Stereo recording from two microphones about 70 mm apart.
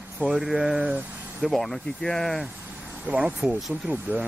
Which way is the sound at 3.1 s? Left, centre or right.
Centre.